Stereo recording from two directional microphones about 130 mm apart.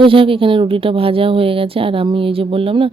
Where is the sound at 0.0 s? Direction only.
45° right (ahead or behind).